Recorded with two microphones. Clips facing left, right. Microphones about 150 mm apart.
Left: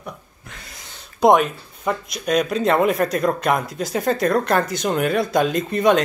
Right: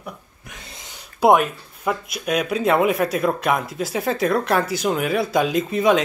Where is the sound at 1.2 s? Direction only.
5° right (ahead or behind).